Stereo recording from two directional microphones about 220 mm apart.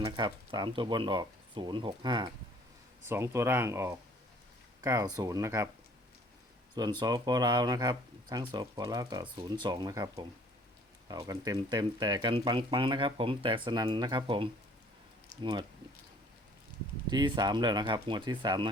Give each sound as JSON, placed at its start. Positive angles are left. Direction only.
{"t": 0.0, "sound": "speech", "side_deg": -20}
{"t": 7.0, "sound": "speech", "side_deg": -20}
{"t": 17.1, "sound": "speech", "side_deg": -20}